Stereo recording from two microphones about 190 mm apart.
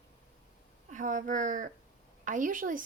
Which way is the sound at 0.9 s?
45° right (ahead or behind).